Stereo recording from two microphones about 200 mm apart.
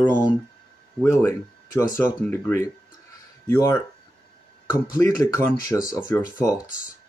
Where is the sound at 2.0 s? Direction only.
10° left (ahead or behind).